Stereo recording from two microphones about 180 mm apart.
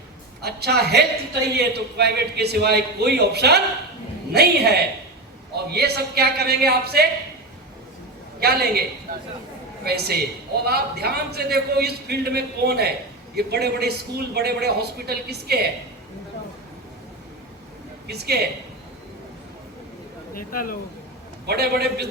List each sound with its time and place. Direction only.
0.4 s a man's voice: 65° right (ahead or behind)
8.4 s a man's voice: 60° right (ahead or behind)
9.1 s speech: 50° right (ahead or behind)
9.8 s a man's voice: 60° right (ahead or behind)
18.1 s a man's voice: 65° right (ahead or behind)
20.3 s speech: 50° left (ahead or behind)
21.4 s a man's voice: 65° right (ahead or behind)